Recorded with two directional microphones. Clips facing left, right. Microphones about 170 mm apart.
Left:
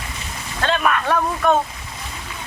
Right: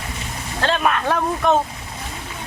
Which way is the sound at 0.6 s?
25° right (ahead or behind).